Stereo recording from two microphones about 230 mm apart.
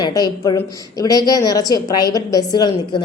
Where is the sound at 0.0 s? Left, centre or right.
Centre.